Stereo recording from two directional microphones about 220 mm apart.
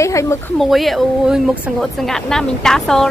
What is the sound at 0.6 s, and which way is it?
Speech, centre (ahead or behind).